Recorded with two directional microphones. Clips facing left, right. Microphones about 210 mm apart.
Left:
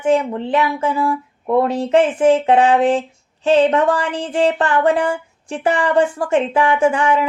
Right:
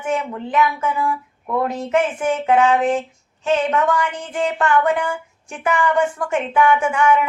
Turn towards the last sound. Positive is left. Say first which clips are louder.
# left 2 dB
turn(degrees=35)  # may be behind; listen again after turning